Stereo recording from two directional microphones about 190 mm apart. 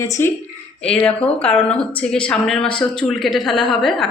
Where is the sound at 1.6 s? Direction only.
5° left (ahead or behind).